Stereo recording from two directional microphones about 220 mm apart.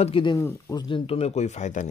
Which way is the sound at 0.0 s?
25° left (ahead or behind).